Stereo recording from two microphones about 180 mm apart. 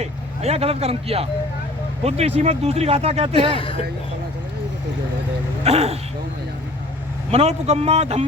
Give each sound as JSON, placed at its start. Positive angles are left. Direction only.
{"t": 0.0, "sound": "speech", "side_deg": -35}
{"t": 3.5, "sound": "speech", "side_deg": 30}
{"t": 5.6, "sound": "speech", "side_deg": -35}
{"t": 7.3, "sound": "speech", "side_deg": -35}